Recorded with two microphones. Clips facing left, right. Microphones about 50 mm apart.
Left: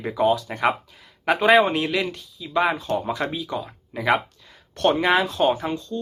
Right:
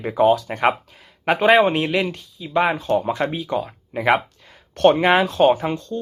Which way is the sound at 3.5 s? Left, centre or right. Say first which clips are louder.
Right 6 dB; right.